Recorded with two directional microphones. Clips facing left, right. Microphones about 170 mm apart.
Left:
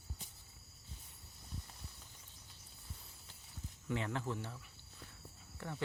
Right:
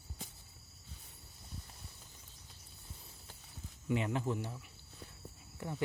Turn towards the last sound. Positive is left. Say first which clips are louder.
# right 3 dB
turn(degrees=-15)  # may be behind; listen again after turning